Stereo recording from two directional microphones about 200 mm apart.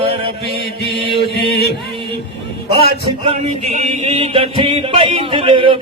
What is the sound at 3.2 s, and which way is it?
Chant, 30° right (ahead or behind).